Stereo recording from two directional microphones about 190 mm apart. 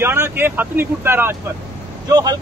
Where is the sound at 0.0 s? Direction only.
10° right (ahead or behind).